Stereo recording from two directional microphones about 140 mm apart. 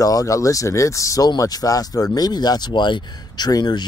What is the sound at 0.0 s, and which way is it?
Speech, 25° left (ahead or behind).